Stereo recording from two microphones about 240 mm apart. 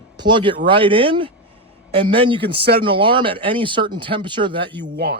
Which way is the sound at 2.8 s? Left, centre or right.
Right.